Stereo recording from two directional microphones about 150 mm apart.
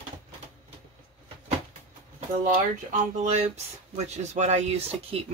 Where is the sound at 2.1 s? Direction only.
50° right (ahead or behind).